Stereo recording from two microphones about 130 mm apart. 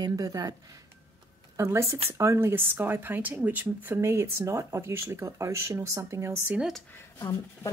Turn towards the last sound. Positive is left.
turn(degrees=25)  # may be behind; listen again after turning